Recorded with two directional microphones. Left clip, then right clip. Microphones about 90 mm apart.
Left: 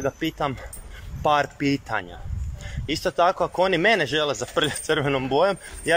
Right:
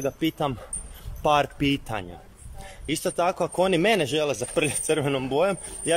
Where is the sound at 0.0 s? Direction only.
35° right (ahead or behind).